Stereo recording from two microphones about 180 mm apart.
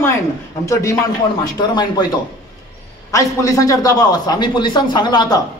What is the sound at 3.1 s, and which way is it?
Speech, 20° left (ahead or behind).